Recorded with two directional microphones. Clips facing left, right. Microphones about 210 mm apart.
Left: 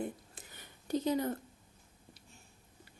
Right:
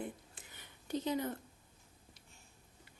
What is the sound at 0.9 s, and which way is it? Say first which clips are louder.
Speech: left 4 dB; 40° left (ahead or behind).